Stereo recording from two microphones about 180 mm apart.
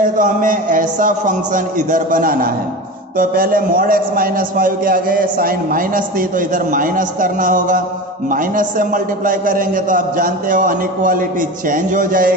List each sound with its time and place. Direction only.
0.0 s a man's voice: 50° right (ahead or behind)